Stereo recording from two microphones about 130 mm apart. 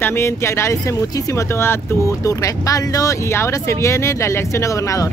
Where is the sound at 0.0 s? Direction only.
20° left (ahead or behind).